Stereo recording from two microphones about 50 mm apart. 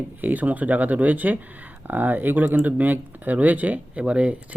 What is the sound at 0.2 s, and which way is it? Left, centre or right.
Speech, right.